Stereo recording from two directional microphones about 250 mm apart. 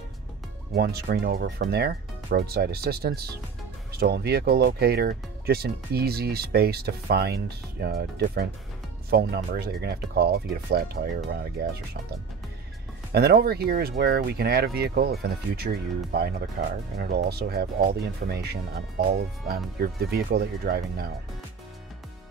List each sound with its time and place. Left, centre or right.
0.7 s speech: right
13.1 s speech: right